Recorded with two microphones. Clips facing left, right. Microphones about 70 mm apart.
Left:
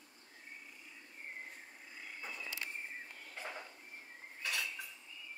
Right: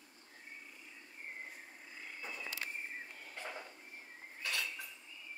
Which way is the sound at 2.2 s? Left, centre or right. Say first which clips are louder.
Right 1 dB; centre.